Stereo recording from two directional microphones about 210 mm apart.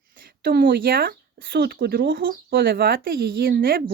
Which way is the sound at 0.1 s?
45° right (ahead or behind).